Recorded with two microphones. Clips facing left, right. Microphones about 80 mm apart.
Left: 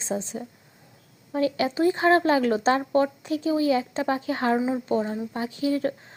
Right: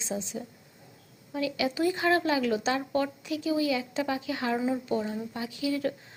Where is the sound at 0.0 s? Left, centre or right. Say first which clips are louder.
Left 4 dB; left.